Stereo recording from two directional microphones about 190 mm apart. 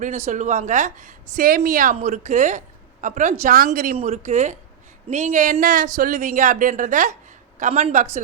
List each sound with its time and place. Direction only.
0.3 s a woman's voice: 40° right (ahead or behind)
3.9 s a woman's voice: 35° right (ahead or behind)